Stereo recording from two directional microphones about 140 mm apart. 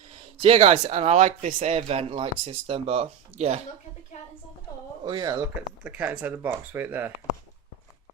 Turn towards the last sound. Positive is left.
turn(degrees=-15)  # may be behind; listen again after turning